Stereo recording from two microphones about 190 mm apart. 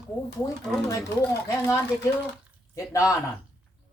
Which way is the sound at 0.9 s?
15° left (ahead or behind).